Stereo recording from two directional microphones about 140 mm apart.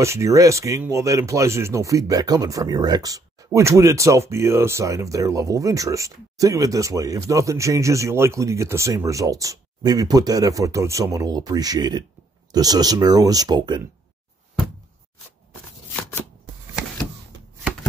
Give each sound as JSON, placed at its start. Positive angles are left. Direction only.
{"t": 0.0, "sound": "speech", "side_deg": -20}